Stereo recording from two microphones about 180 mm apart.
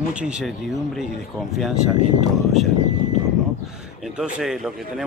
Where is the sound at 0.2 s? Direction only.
5° right (ahead or behind).